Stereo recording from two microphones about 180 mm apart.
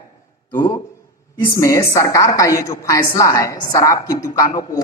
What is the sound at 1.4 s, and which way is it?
A woman's voice, 15° left (ahead or behind).